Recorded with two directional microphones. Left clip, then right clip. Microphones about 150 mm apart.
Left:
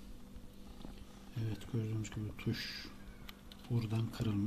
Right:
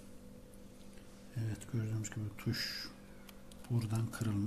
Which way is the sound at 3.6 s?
10° right (ahead or behind).